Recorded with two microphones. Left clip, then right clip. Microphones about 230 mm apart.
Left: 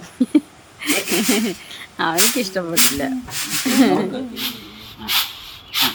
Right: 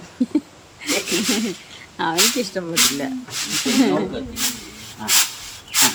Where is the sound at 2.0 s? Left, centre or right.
Centre.